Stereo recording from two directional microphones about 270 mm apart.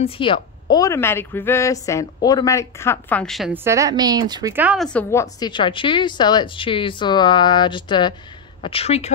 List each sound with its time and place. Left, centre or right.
0.0 s a woman's voice: centre